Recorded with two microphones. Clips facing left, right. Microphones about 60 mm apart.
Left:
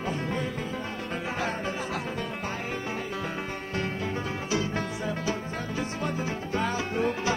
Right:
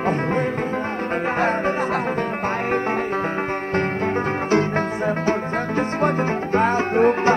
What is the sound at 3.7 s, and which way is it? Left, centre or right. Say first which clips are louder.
Music: right 9 dB; right.